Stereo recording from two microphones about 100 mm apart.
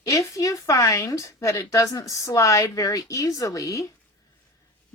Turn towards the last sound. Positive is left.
turn(degrees=35)  # may be behind; listen again after turning